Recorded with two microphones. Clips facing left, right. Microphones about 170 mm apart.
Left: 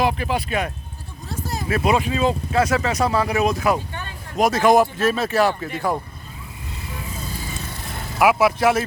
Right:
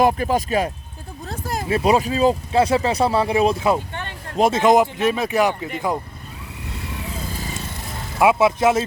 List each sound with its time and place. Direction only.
0.0 s speech: 45° right (ahead or behind); by 6.0 s 15° right (ahead or behind)
8.2 s speech: 25° right (ahead or behind)